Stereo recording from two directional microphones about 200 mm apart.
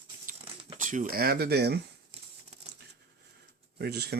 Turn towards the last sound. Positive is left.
turn(degrees=-55)  # may be behind; listen again after turning